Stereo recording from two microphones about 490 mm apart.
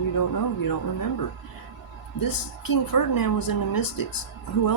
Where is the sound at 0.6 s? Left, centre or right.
Left.